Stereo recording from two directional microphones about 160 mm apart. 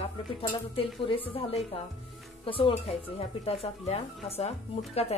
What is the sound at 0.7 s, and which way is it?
Speech, 35° left (ahead or behind).